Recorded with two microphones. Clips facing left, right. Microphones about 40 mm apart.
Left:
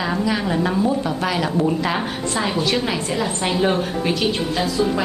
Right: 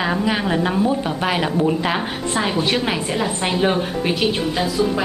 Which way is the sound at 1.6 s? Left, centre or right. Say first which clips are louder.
Right 1 dB; centre.